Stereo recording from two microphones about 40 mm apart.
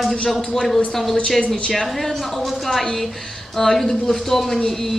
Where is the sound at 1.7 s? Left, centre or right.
Centre.